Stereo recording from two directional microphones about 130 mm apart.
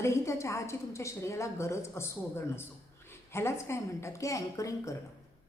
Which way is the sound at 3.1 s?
20° left (ahead or behind).